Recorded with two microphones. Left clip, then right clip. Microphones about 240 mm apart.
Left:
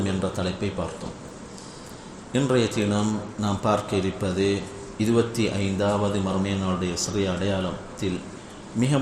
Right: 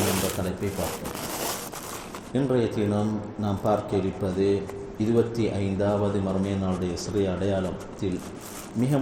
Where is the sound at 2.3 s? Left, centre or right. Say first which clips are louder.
Left 2 dB; left.